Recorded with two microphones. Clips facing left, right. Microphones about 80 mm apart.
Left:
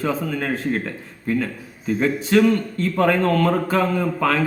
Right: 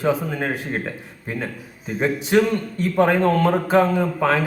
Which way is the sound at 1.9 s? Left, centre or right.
Right.